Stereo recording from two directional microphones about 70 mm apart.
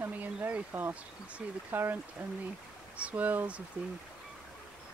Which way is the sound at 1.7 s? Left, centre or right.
Right.